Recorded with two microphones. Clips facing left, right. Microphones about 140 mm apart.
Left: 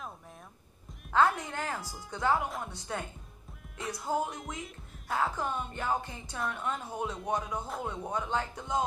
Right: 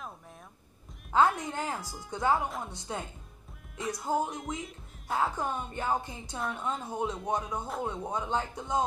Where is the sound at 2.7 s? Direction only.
20° right (ahead or behind).